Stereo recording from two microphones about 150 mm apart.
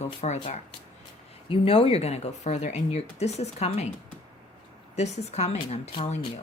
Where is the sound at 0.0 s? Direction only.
45° left (ahead or behind).